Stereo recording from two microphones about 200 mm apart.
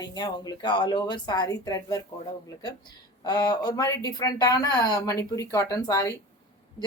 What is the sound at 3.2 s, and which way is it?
Speech, 20° left (ahead or behind).